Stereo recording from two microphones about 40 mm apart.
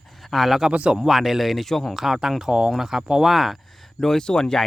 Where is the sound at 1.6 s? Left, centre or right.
Centre.